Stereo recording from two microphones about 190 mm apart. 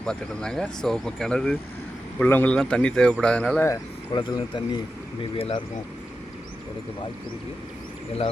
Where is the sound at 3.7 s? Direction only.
25° left (ahead or behind).